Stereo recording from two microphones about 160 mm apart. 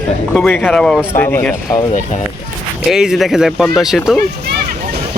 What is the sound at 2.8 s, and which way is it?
Speech, 5° right (ahead or behind).